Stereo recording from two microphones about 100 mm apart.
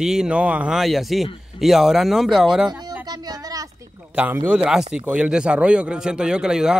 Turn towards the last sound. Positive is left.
turn(degrees=-5)  # may be behind; listen again after turning